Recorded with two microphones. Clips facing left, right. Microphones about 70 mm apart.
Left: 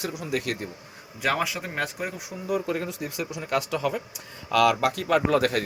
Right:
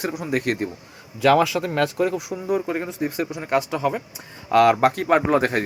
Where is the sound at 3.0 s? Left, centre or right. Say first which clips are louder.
Right 6 dB; right.